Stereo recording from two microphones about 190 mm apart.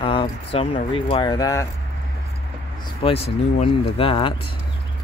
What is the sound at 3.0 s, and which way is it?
Speech, 30° left (ahead or behind).